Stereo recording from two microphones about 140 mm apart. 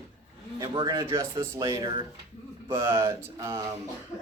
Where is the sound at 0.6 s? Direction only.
35° right (ahead or behind).